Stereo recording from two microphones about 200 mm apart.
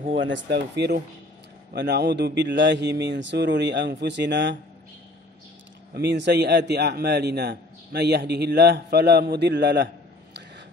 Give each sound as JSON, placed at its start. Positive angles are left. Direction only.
{"t": 0.1, "sound": "a man's voice", "side_deg": -65}
{"t": 5.9, "sound": "a man's voice", "side_deg": -60}